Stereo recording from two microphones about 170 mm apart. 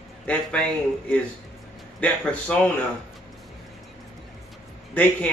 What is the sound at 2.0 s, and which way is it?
Speech, 10° left (ahead or behind).